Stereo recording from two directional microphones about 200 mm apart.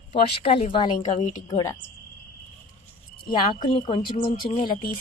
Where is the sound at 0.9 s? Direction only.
35° left (ahead or behind).